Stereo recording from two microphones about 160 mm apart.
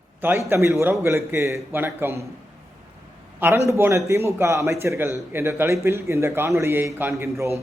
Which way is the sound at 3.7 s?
15° right (ahead or behind).